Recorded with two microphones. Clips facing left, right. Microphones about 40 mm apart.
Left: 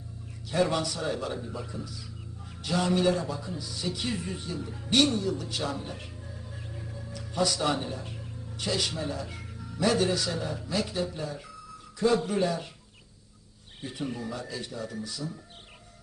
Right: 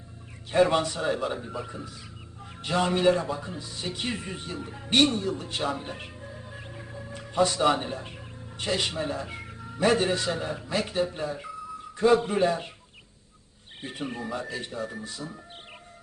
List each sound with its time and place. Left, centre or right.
0.5 s a man's voice: right
13.8 s a man's voice: right